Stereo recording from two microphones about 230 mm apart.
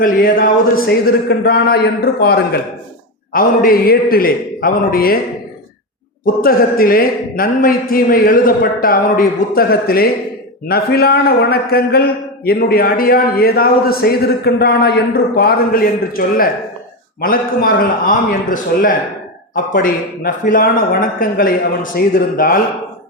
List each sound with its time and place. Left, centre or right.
0.0 s a man's voice: left
6.2 s a man's voice: left